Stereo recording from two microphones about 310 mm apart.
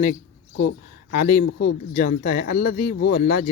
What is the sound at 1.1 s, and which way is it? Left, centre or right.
Speech, left.